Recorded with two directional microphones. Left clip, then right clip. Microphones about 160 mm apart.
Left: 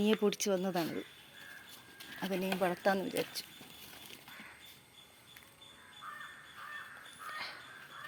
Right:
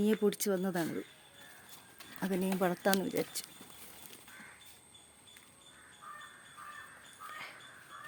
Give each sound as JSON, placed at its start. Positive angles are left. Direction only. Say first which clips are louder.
{"t": 0.0, "sound": "speech", "louder": "even", "side_deg": -35}
{"t": 2.2, "sound": "speech", "louder": "right 1 dB", "side_deg": -45}
{"t": 7.3, "sound": "a sound", "louder": "left 5 dB", "side_deg": -10}